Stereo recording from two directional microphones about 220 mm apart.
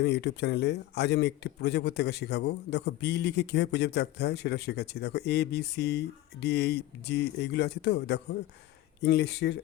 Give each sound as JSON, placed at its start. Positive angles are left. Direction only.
{"t": 0.0, "sound": "a man's voice", "side_deg": 50}